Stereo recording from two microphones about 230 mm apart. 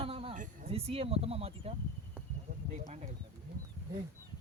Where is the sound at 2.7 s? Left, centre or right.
Right.